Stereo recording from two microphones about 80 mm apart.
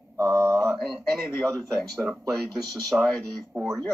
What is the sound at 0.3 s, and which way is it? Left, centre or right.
Mantra, right.